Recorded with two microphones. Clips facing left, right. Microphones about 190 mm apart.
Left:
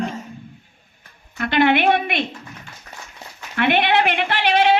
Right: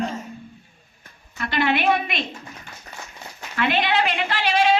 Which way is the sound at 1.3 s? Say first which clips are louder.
Left 5 dB; 60° left (ahead or behind).